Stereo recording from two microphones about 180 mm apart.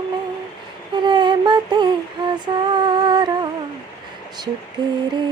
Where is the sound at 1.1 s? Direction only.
25° right (ahead or behind).